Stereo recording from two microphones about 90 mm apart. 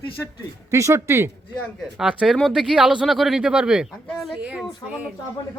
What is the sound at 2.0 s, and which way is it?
Speech, 10° right (ahead or behind).